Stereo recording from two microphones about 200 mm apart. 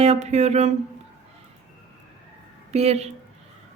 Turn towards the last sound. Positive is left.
turn(degrees=-30)  # may be behind; listen again after turning